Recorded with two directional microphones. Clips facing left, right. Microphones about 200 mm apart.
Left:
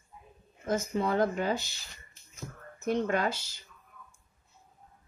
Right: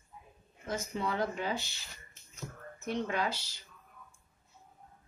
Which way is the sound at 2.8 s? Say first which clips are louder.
Left 5 dB; 50° left (ahead or behind).